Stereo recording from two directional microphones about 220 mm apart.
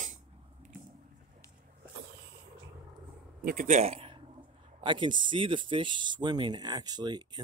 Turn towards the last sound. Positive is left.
turn(degrees=-20)  # may be behind; listen again after turning